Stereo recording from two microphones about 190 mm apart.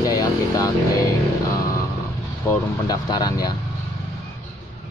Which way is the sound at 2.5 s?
20° left (ahead or behind).